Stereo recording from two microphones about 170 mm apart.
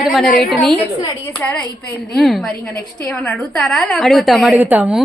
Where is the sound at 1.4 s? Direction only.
10° left (ahead or behind).